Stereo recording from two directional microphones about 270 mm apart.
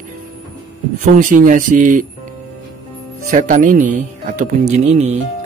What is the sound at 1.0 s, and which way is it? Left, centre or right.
Speech, right.